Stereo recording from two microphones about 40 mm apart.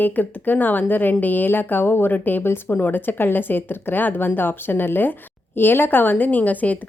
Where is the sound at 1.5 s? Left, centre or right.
Left.